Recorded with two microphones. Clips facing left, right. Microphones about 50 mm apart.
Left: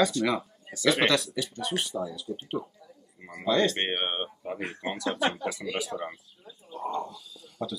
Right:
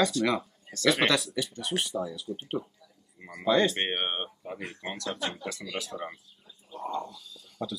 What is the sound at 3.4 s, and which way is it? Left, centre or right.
Speech, centre.